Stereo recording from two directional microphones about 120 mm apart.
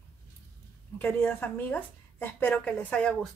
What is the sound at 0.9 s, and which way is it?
A woman's voice, 15° left (ahead or behind).